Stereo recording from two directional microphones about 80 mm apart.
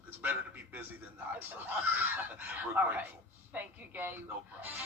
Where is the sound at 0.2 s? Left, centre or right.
Right.